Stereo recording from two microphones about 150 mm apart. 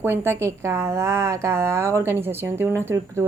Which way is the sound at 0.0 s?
15° right (ahead or behind).